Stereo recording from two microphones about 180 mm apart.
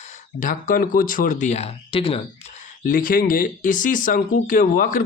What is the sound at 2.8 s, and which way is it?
Speech, 50° left (ahead or behind).